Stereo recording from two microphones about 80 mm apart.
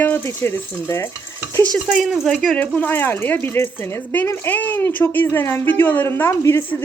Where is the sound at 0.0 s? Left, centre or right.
Left.